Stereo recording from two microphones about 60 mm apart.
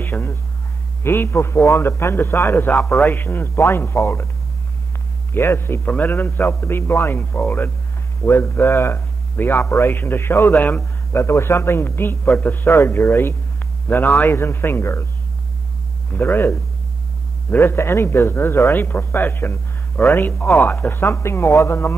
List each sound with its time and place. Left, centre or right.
0.0 s speech: left
5.3 s speech: left
5.9 s speech: left
6.5 s speech: left
10.8 s speech: left
13.6 s a sound: left
14.3 s speech: left
16.1 s speech: left